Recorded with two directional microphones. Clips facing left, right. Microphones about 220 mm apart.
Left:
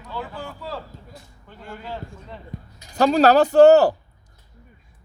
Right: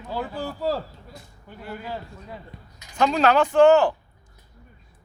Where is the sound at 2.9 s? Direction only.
40° left (ahead or behind).